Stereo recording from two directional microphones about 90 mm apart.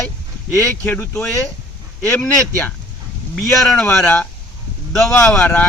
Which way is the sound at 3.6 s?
15° left (ahead or behind).